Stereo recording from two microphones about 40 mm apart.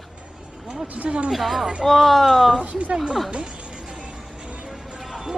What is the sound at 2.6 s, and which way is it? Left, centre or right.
Speech, right.